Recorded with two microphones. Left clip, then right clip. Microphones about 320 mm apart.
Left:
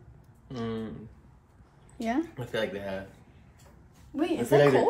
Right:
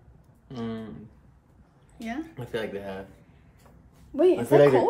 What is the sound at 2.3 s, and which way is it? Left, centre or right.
Speech, centre.